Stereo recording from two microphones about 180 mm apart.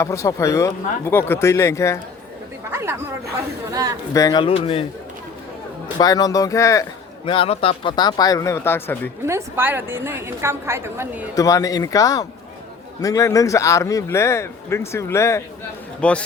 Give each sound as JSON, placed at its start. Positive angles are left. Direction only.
{"t": 0.0, "sound": "speech", "side_deg": 15}
{"t": 2.6, "sound": "chatter", "side_deg": -15}
{"t": 3.7, "sound": "a man's voice", "side_deg": -20}
{"t": 4.1, "sound": "speech", "side_deg": 20}
{"t": 6.0, "sound": "speech", "side_deg": 20}
{"t": 7.3, "sound": "speech", "side_deg": 30}
{"t": 9.2, "sound": "a woman's voice", "side_deg": -15}
{"t": 11.3, "sound": "speech", "side_deg": 20}